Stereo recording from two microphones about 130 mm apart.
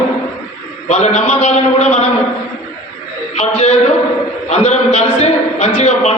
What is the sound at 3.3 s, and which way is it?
Music, 60° left (ahead or behind).